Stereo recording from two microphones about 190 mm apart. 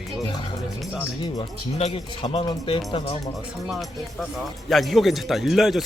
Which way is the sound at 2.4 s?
25° left (ahead or behind).